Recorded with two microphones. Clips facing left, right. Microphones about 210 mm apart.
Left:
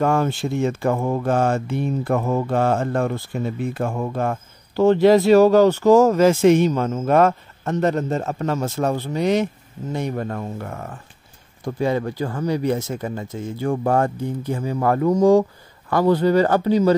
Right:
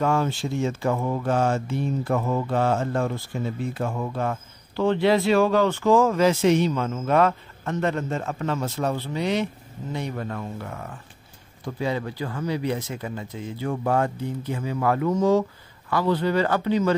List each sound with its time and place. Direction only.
0.0 s speech: 55° left (ahead or behind)